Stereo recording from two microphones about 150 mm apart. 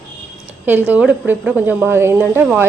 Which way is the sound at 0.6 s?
10° right (ahead or behind).